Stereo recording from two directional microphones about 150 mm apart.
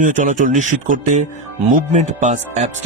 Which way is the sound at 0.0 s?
60° right (ahead or behind).